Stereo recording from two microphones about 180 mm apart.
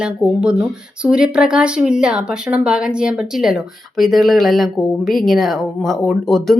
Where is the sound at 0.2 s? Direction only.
5° right (ahead or behind).